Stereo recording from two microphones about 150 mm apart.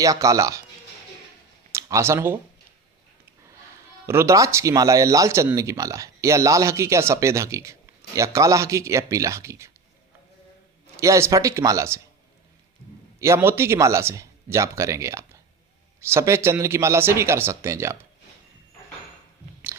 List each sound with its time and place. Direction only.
0.0 s speech: 20° right (ahead or behind)
1.7 s speech: 20° right (ahead or behind)
4.0 s speech: 15° right (ahead or behind)
10.9 s speech: 20° right (ahead or behind)
13.1 s speech: 20° right (ahead or behind)